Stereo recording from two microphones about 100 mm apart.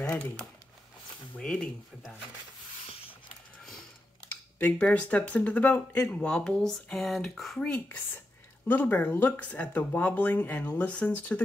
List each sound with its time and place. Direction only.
1.3 s speech: 10° left (ahead or behind)
4.6 s speech: 15° left (ahead or behind)
7.6 s speech: 15° left (ahead or behind)